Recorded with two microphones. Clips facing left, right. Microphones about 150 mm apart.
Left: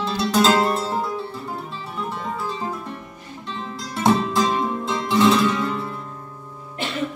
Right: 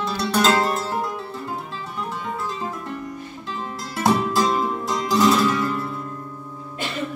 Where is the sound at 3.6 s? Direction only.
Centre (ahead or behind).